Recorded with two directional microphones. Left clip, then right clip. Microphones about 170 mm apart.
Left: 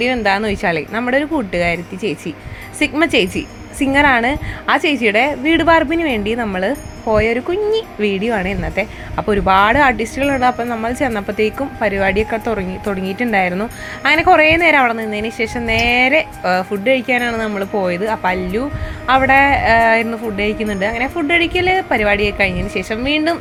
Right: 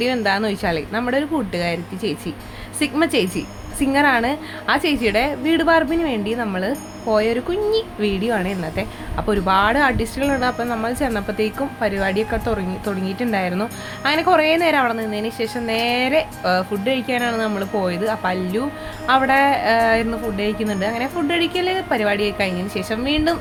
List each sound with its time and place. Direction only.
0.0 s a woman's voice: 15° left (ahead or behind)